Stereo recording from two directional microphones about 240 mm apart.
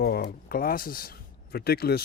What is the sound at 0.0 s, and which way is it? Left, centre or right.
Speech, left.